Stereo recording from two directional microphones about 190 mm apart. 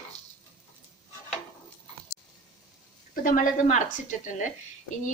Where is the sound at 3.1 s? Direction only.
45° left (ahead or behind).